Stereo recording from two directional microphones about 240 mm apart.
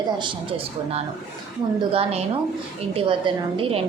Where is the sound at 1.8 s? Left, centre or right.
Right.